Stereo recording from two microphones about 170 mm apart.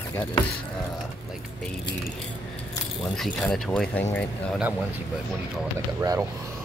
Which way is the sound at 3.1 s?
Centre (ahead or behind).